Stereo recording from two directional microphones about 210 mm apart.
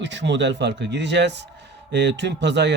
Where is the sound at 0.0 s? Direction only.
60° right (ahead or behind).